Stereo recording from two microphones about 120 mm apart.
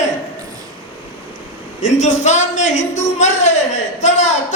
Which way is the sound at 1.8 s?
80° left.